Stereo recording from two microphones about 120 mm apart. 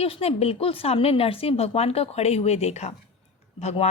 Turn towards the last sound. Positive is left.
turn(degrees=65)  # may be behind; listen again after turning